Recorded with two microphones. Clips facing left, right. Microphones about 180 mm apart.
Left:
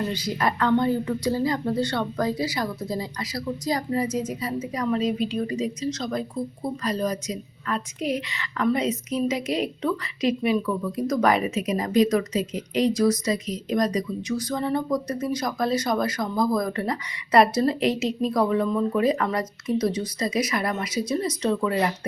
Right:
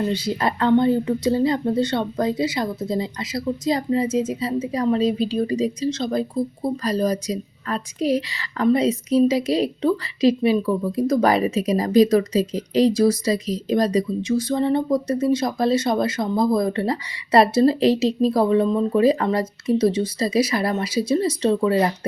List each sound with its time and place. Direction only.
0.1 s a woman's voice: 30° right (ahead or behind)